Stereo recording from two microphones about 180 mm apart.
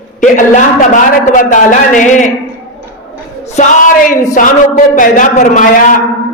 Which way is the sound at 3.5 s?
45° left (ahead or behind).